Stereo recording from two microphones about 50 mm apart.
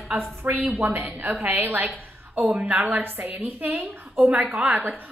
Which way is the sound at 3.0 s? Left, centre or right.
Right.